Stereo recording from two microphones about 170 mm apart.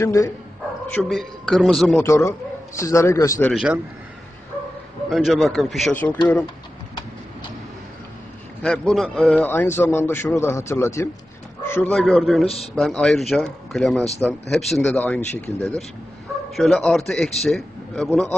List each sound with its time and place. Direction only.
0.0 s a man's voice: 10° left (ahead or behind)
2.0 s a man's voice: 15° left (ahead or behind)
3.5 s a man's voice: 5° right (ahead or behind)
5.1 s a man's voice: centre (ahead or behind)
8.6 s a man's voice: centre (ahead or behind)
11.6 s bird: 15° left (ahead or behind)
11.9 s a man's voice: centre (ahead or behind)